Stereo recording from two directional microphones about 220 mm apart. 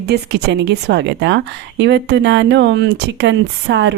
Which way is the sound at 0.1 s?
50° right (ahead or behind).